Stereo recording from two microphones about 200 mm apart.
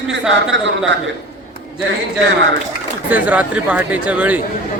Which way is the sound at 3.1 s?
5° right (ahead or behind).